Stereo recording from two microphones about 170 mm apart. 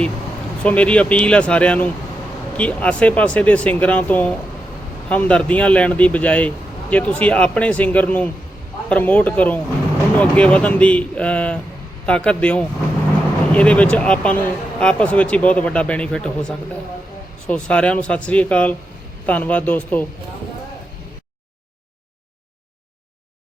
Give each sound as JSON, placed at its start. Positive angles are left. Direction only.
{"t": 0.6, "sound": "speech", "side_deg": 5}